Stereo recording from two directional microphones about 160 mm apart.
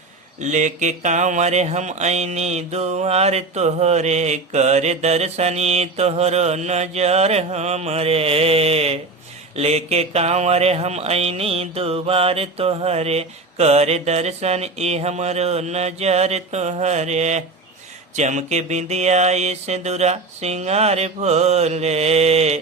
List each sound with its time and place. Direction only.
0.3 s speech: 50° right (ahead or behind)
9.6 s a sound: 40° right (ahead or behind)
18.2 s speech: 45° right (ahead or behind)